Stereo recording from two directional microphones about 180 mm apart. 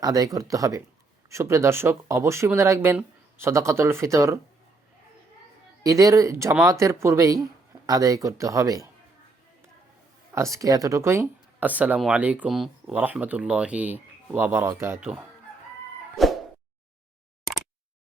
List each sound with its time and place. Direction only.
0.0 s speech: 20° right (ahead or behind)
5.8 s speech: 20° right (ahead or behind)
10.3 s speech: 15° right (ahead or behind)
16.1 s a sound: centre (ahead or behind)